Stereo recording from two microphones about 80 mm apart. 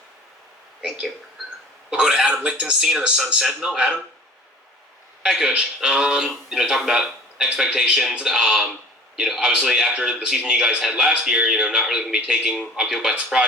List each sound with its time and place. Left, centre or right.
0.8 s a man's voice: centre
5.2 s a man's voice: centre